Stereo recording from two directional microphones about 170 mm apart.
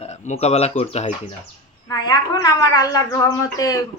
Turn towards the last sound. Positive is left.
turn(degrees=20)  # may be behind; listen again after turning